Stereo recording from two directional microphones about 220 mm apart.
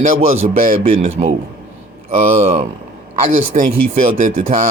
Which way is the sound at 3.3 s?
35° right (ahead or behind).